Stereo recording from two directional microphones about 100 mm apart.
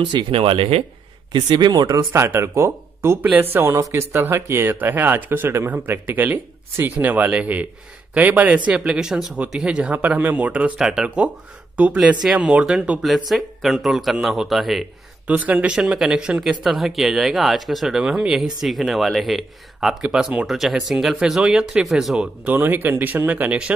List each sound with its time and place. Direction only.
0.0 s speech: 55° right (ahead or behind); by 0.8 s 70° right (ahead or behind)
1.3 s speech: 45° right (ahead or behind)
2.1 s speech: 25° right (ahead or behind); by 14.9 s centre (ahead or behind)
15.2 s speech: 15° right (ahead or behind)
22.4 s speech: 15° right (ahead or behind)